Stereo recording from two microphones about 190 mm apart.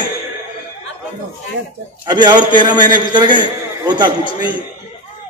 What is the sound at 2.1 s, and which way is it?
A man's voice, 25° right (ahead or behind).